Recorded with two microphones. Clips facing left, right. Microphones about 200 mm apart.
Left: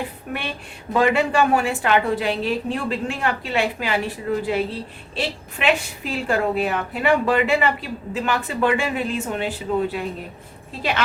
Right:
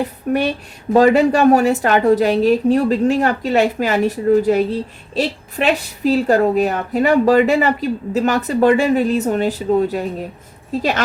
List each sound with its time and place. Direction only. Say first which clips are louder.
0.0 s a woman's voice: right 11 dB; 40° right (ahead or behind)